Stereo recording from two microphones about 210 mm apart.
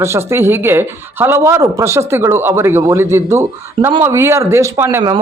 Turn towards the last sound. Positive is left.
turn(degrees=-15)  # may be behind; listen again after turning